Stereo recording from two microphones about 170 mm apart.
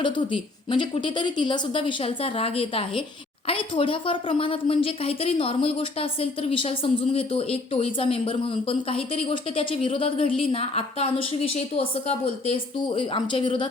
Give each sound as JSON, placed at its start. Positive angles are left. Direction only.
{"t": 0.0, "sound": "a woman's voice", "side_deg": 30}